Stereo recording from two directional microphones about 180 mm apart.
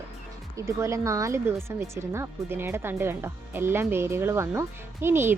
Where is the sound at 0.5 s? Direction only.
15° right (ahead or behind).